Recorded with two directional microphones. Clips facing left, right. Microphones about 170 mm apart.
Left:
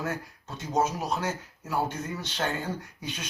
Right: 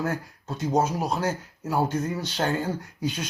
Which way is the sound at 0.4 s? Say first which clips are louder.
Right 10 dB; 40° right (ahead or behind).